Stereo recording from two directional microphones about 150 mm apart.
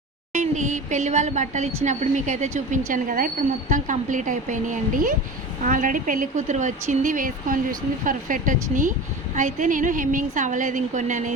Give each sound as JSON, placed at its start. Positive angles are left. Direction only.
{"t": 0.3, "sound": "a woman's voice", "side_deg": -55}